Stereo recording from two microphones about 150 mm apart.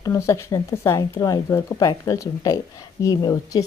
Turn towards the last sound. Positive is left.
turn(degrees=25)  # may be behind; listen again after turning